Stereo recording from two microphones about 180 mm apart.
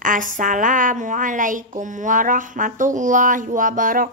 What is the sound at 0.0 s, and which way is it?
A woman's voice, 45° right (ahead or behind).